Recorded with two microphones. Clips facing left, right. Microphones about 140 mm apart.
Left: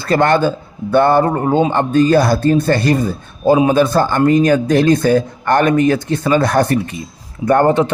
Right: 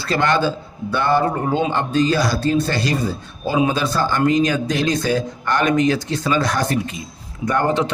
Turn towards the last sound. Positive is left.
turn(degrees=50)  # may be behind; listen again after turning